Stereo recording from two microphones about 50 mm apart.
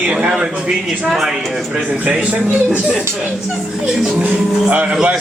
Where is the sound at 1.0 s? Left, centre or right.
Centre.